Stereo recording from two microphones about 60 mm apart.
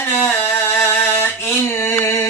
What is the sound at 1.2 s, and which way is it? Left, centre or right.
Mantra, left.